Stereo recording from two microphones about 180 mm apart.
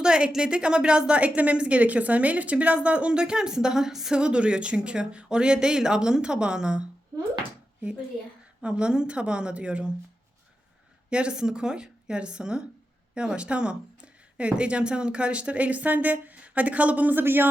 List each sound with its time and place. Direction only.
0.0 s a woman's voice: 5° right (ahead or behind)
8.6 s a woman's voice: 5° right (ahead or behind)
11.1 s a woman's voice: 5° right (ahead or behind)